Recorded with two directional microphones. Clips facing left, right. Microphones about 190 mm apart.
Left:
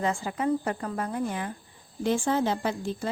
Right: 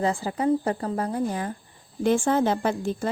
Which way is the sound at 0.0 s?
35° right (ahead or behind).